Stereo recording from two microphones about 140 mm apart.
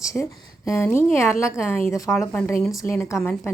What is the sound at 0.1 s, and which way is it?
A woman's voice, 20° left (ahead or behind).